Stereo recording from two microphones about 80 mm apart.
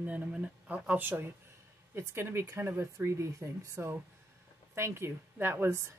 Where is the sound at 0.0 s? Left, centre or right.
Centre.